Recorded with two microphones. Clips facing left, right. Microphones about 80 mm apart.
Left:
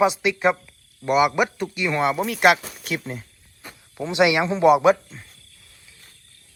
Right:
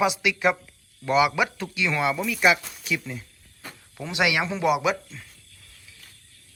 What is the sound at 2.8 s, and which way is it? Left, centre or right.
Speech, left.